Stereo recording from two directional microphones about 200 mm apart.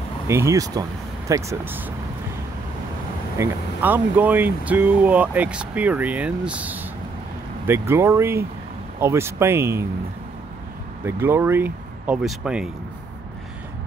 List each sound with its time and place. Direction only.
0.3 s speech: 15° right (ahead or behind)
3.3 s speech: 10° right (ahead or behind)
11.1 s speech: 10° right (ahead or behind)